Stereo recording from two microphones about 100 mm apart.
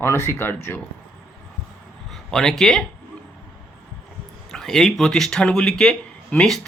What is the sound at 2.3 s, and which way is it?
Speech, 5° left (ahead or behind).